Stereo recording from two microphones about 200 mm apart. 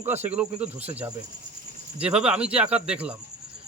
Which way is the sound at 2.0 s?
5° right (ahead or behind).